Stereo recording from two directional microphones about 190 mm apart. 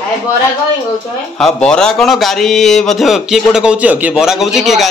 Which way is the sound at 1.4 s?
5° left (ahead or behind).